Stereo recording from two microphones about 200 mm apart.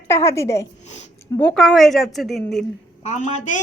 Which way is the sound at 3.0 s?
35° left (ahead or behind).